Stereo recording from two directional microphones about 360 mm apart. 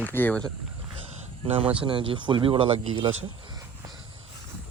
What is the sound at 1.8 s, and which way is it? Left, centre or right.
Speech, centre.